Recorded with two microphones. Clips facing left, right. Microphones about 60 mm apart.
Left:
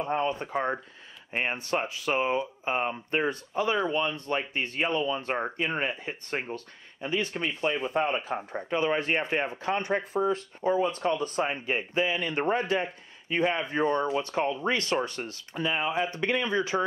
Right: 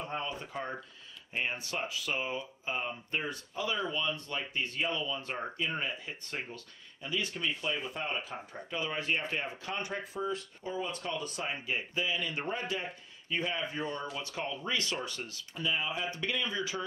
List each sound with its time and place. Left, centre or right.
0.0 s speech: left